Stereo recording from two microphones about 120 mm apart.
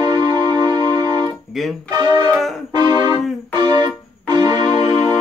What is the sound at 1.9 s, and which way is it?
Music, 30° right (ahead or behind).